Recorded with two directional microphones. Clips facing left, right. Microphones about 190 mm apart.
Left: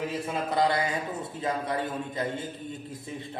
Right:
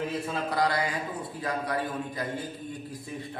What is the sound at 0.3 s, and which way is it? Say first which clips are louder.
A man's voice: left 3 dB; 25° left (ahead or behind).